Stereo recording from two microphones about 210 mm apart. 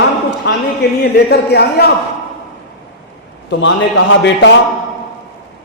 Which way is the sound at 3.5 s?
60° left (ahead or behind).